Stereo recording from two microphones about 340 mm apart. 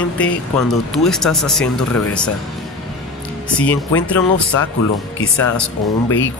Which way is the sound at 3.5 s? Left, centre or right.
Centre.